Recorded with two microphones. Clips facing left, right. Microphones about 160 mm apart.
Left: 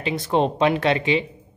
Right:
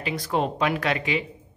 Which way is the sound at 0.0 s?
25° left (ahead or behind).